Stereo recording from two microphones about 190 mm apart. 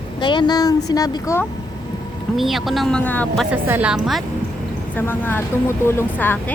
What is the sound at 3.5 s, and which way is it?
Speech, 10° right (ahead or behind).